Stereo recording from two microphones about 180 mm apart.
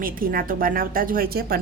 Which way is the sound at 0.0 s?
50° right (ahead or behind).